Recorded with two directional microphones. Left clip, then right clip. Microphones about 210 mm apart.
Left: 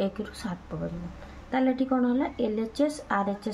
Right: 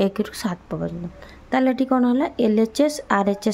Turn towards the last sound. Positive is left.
turn(degrees=-45)  # may be behind; listen again after turning